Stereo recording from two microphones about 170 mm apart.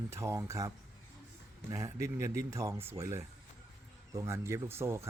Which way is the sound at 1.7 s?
20° right (ahead or behind).